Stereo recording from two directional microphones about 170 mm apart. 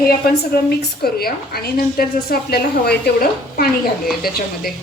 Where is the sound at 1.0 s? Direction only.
65° left (ahead or behind).